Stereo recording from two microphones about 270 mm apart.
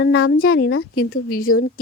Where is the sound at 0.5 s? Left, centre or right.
Left.